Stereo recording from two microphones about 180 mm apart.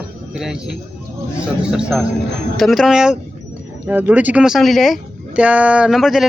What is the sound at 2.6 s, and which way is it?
Speech, centre (ahead or behind).